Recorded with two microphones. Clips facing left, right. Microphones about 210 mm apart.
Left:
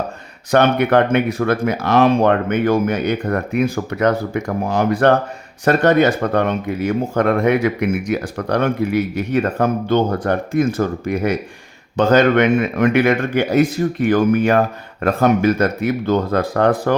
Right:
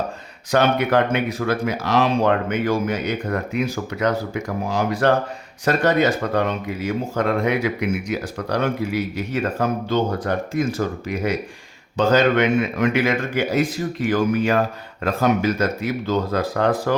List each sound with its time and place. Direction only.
0.5 s speech: 60° left (ahead or behind)